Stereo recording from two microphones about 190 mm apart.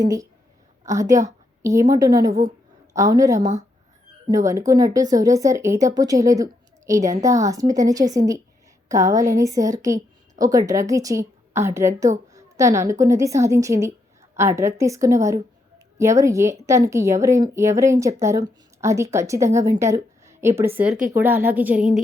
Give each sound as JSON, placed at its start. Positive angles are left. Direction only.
{"t": 0.0, "sound": "a woman's voice", "side_deg": -20}